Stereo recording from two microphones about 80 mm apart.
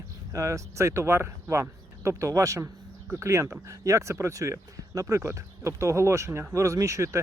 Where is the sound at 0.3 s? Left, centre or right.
Right.